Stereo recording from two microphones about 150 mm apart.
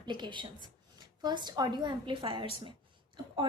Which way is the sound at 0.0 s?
30° right (ahead or behind).